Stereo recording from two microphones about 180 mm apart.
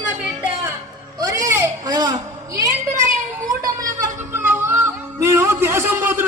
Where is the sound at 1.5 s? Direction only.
15° right (ahead or behind).